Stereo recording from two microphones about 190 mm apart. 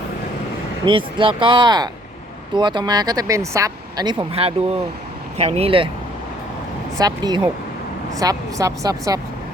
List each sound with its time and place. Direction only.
0.9 s speech: 25° right (ahead or behind)
7.0 s speech: 20° right (ahead or behind)